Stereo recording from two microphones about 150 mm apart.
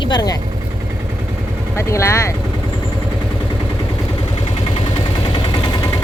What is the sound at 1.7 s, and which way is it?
Speech, 20° left (ahead or behind).